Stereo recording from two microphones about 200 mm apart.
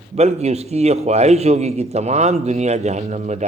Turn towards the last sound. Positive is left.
turn(degrees=-35)  # may be behind; listen again after turning